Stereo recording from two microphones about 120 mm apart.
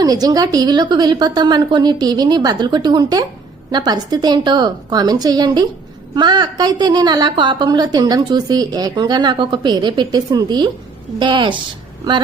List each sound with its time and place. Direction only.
0.0 s a woman's voice: 30° right (ahead or behind)